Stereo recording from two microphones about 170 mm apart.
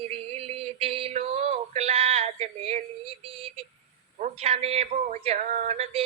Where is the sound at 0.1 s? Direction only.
35° right (ahead or behind).